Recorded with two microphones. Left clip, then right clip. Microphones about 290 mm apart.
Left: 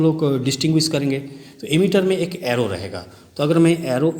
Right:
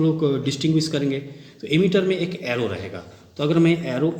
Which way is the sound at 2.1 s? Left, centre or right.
Left.